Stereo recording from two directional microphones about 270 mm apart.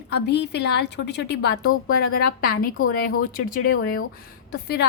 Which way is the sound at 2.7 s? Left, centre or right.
Left.